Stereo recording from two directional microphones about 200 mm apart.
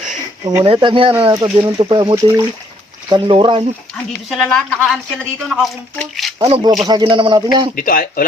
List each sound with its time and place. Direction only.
0.4 s speech: 25° right (ahead or behind)
4.3 s speech: centre (ahead or behind)
6.5 s speech: 20° right (ahead or behind)
7.8 s speech: 45° left (ahead or behind)